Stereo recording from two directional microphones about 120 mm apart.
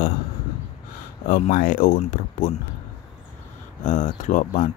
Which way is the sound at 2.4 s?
90° left.